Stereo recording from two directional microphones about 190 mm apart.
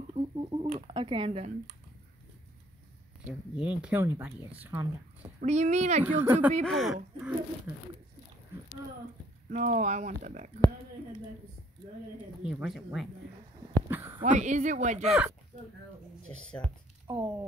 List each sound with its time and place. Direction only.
0.1 s a sound: 30° right (ahead or behind)
3.3 s speech: 5° right (ahead or behind)
5.4 s speech: 40° right (ahead or behind)
6.0 s speech: 10° right (ahead or behind)
9.5 s speech: 45° right (ahead or behind)
12.4 s speech: 5° right (ahead or behind)
13.8 s a sound: 10° right (ahead or behind)
14.2 s speech: 40° right (ahead or behind)
15.0 s speech: 5° right (ahead or behind)
16.3 s speech: 5° left (ahead or behind)
17.1 s speech: 10° right (ahead or behind)